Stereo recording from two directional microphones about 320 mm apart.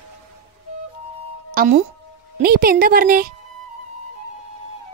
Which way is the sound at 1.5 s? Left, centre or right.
Right.